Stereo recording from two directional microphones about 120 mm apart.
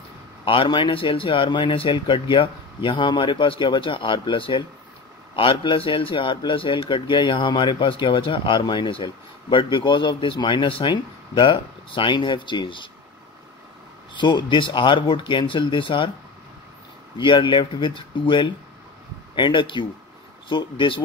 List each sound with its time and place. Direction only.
0.5 s speech: 45° left (ahead or behind)
14.1 s speech: 40° left (ahead or behind)
17.2 s speech: 40° left (ahead or behind)